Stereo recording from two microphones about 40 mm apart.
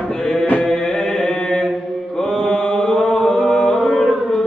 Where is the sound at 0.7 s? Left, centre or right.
Centre.